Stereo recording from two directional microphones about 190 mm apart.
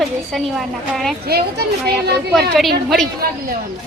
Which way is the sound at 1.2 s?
55° right (ahead or behind).